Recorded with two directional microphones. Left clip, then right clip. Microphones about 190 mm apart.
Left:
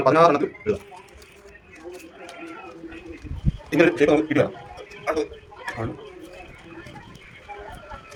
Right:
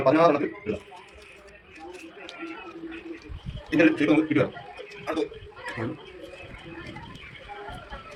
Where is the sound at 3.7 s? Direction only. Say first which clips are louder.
Left 3 dB; 60° left (ahead or behind).